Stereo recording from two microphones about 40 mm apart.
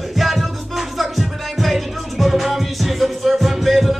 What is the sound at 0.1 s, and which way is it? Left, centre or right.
Music, centre.